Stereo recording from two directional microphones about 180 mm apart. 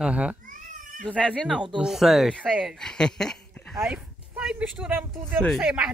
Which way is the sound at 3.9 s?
10° right (ahead or behind).